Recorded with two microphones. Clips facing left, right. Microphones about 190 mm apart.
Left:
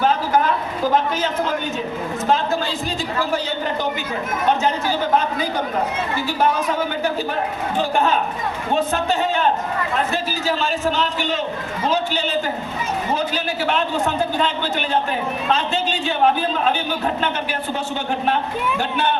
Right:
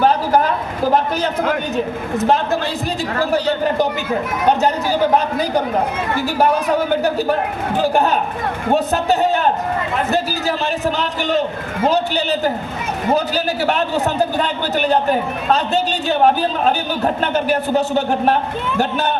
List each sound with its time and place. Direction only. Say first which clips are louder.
3.2 s a man's voice: right 6 dB; 35° right (ahead or behind)
8.7 s a man's voice: right 4 dB; 40° right (ahead or behind)